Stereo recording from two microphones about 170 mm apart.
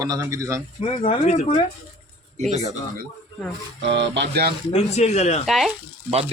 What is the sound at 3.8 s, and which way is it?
Speech, 90° right.